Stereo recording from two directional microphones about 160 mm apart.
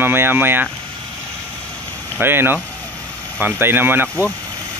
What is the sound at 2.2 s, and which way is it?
Speech, 15° right (ahead or behind).